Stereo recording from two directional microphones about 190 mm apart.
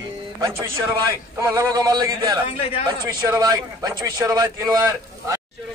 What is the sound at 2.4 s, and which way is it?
Speech, 30° left (ahead or behind).